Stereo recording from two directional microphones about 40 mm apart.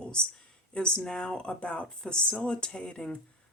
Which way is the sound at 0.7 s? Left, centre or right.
Left.